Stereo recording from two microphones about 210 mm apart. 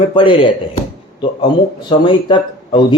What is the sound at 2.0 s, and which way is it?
Speech, 20° left (ahead or behind).